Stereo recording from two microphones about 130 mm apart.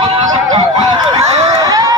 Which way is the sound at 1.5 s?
30° right (ahead or behind).